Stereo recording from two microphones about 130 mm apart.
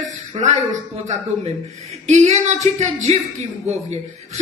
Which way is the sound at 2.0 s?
60° right (ahead or behind).